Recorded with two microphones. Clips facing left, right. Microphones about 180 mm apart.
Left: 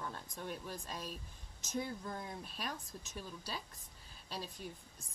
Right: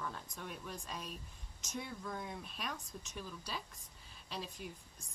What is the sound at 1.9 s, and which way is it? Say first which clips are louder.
Speech: left 1 dB; 30° left (ahead or behind).